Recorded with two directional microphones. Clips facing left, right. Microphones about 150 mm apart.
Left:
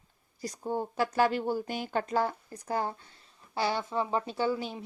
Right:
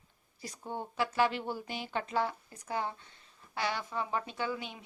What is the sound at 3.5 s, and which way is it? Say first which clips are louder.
Speech: left 5 dB; 30° left (ahead or behind).